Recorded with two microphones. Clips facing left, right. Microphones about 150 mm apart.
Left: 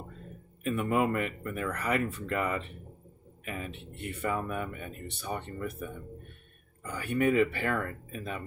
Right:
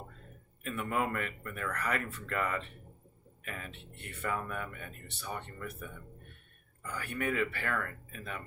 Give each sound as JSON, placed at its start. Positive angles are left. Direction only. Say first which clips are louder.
{"t": 0.7, "sound": "speech", "louder": "left 6 dB", "side_deg": 20}